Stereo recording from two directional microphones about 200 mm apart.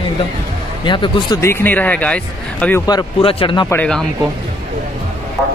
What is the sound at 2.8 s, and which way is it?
Speech, 25° left (ahead or behind).